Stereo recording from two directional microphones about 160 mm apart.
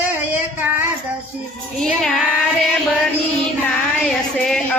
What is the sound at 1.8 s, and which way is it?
Child singing, centre (ahead or behind).